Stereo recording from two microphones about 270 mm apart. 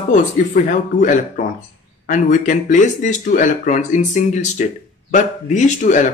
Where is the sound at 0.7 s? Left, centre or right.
Left.